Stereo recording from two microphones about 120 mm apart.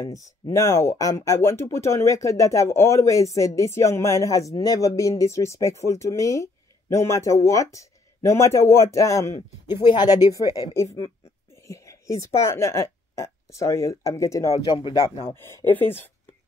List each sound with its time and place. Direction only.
0.0 s speech: 30° left (ahead or behind)
9.7 s speech: 35° left (ahead or behind)
11.6 s a sound: 25° left (ahead or behind)
12.4 s speech: 25° left (ahead or behind)
14.5 s speech: 45° left (ahead or behind)
15.7 s a woman's voice: 15° left (ahead or behind)